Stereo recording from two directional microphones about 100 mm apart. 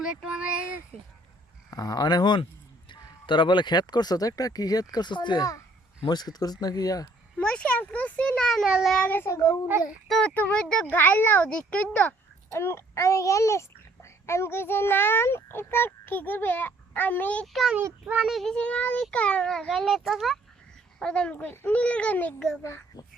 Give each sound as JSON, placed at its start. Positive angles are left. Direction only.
{"t": 0.0, "sound": "speech", "side_deg": -10}
{"t": 1.7, "sound": "speech", "side_deg": 35}
{"t": 7.3, "sound": "a sound", "side_deg": 10}
{"t": 8.7, "sound": "a child's voice", "side_deg": 0}
{"t": 9.0, "sound": "a child's voice", "side_deg": 20}
{"t": 10.1, "sound": "speech", "side_deg": 10}
{"t": 10.9, "sound": "speech", "side_deg": 20}
{"t": 12.5, "sound": "a child's voice", "side_deg": 25}
{"t": 17.4, "sound": "a child's voice", "side_deg": 0}
{"t": 18.0, "sound": "speech", "side_deg": -15}
{"t": 18.3, "sound": "a child's voice", "side_deg": 5}